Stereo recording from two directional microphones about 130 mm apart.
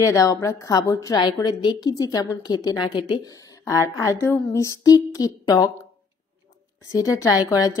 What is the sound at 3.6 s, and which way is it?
Speech, 20° left (ahead or behind).